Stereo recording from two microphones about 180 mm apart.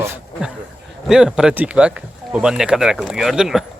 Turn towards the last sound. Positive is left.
turn(degrees=0)  # may be behind; listen again after turning